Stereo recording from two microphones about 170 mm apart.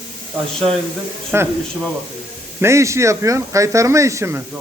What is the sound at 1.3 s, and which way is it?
Speech, 15° right (ahead or behind).